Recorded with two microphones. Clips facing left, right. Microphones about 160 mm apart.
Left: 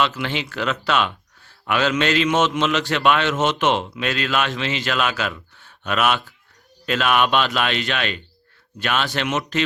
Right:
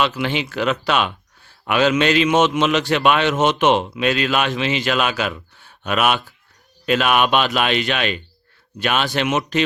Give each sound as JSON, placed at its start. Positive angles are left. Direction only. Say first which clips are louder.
{"t": 0.0, "sound": "a man's voice", "louder": "right 2 dB", "side_deg": -15}